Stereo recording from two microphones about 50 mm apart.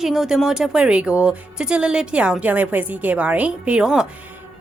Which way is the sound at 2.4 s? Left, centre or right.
Right.